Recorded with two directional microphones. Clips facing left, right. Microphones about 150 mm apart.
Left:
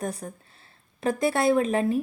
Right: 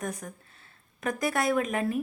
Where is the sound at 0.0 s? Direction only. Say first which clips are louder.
Left 3 dB; 30° left (ahead or behind).